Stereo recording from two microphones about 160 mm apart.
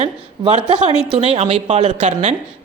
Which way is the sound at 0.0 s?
35° right (ahead or behind).